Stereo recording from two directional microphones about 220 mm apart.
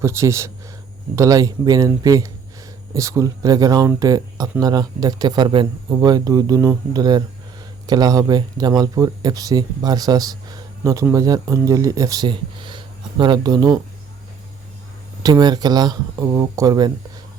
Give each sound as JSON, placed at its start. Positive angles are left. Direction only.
{"t": 0.0, "sound": "speech", "side_deg": -10}
{"t": 15.2, "sound": "speech", "side_deg": -20}